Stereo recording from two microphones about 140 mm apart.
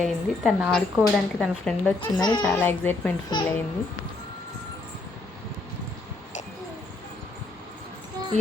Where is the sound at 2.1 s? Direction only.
30° left (ahead or behind).